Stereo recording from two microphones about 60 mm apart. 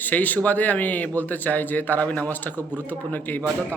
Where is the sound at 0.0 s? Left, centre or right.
Left.